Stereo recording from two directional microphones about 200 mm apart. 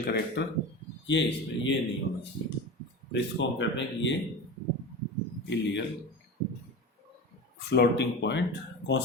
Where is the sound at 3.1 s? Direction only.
65° left (ahead or behind).